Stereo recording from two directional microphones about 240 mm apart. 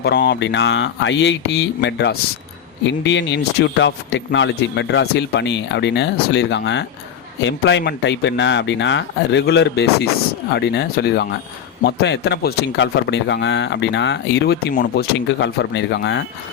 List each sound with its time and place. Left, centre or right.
0.0 s speech: left